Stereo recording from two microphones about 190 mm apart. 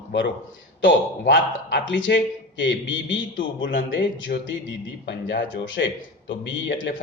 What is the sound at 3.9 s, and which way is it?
Speech, 75° left (ahead or behind).